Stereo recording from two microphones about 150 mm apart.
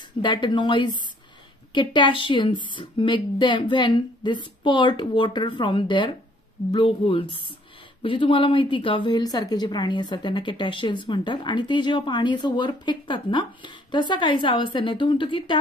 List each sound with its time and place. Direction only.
0.2 s a woman's voice: 30° left (ahead or behind)